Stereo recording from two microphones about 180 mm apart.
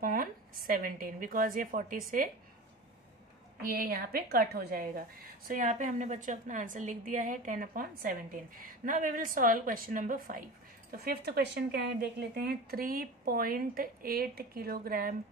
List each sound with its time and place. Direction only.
0.0 s a woman's voice: 55° right (ahead or behind)
3.7 s speech: 55° right (ahead or behind)
5.5 s a woman's voice: 45° right (ahead or behind)